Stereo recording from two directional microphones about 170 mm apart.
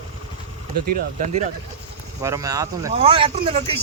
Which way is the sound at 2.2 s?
20° right (ahead or behind).